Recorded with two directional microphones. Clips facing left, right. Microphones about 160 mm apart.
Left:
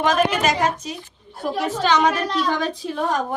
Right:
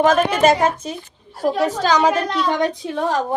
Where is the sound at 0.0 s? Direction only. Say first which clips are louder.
Right 4 dB; 50° right (ahead or behind).